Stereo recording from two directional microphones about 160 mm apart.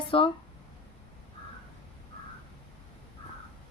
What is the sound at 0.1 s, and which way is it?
Speech, 35° left (ahead or behind).